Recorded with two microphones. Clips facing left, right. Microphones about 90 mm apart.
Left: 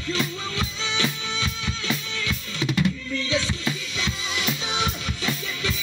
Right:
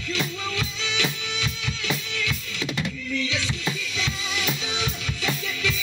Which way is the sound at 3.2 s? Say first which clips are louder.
Left 2 dB; 40° left (ahead or behind).